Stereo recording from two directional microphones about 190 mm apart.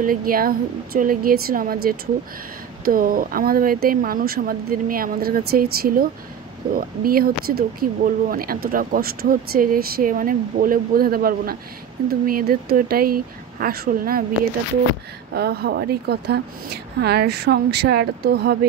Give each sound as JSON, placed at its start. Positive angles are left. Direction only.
{"t": 0.0, "sound": "speech", "side_deg": -50}
{"t": 15.3, "sound": "a woman's voice", "side_deg": -55}